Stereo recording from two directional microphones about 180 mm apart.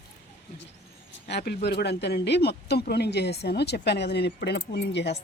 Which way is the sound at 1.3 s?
65° left (ahead or behind).